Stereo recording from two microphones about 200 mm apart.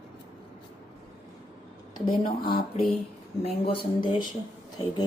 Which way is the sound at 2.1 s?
25° left (ahead or behind).